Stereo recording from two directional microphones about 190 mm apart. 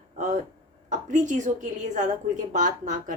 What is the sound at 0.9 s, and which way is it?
A woman's voice, 40° right (ahead or behind).